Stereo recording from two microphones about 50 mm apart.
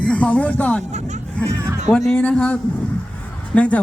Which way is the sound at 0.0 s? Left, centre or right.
Left.